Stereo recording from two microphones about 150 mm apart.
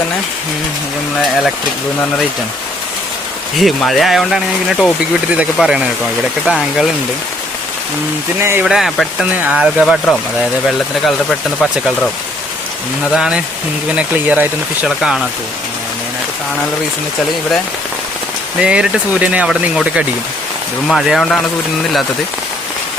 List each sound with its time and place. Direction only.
3.6 s speech: centre (ahead or behind)
8.4 s speech: 15° right (ahead or behind)
8.6 s speech: centre (ahead or behind)
11.3 s speech: centre (ahead or behind)
13.1 s speech: 5° right (ahead or behind)
18.6 s speech: 5° right (ahead or behind)